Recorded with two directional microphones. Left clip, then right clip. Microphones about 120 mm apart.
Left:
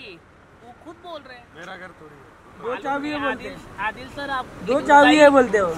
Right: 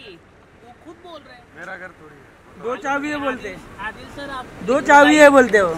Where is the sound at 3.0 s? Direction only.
60° right (ahead or behind).